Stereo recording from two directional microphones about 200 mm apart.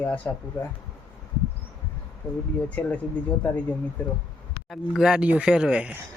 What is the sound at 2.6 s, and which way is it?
Speech, 5° left (ahead or behind).